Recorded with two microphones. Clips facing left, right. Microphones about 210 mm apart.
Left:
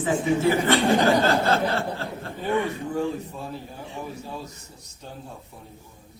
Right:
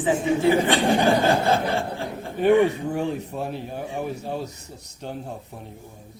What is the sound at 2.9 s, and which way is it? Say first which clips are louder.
Speech: right 1 dB; 65° right (ahead or behind).